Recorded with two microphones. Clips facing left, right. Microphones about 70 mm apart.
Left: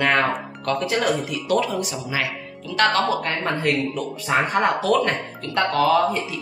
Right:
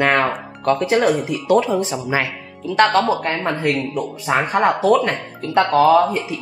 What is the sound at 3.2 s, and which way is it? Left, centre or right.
Speech, centre.